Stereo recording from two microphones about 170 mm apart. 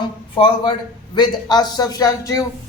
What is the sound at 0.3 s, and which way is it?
A woman's voice, 30° left (ahead or behind).